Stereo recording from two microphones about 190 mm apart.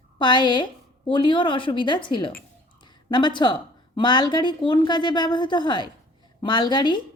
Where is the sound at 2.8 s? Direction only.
25° left (ahead or behind).